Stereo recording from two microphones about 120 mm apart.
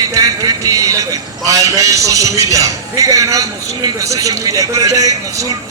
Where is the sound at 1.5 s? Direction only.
25° right (ahead or behind).